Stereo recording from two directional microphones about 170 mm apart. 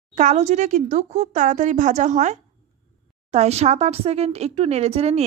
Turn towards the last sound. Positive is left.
turn(degrees=-40)  # may be behind; listen again after turning